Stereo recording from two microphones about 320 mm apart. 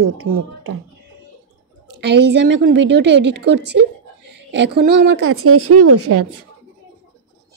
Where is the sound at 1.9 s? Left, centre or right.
Right.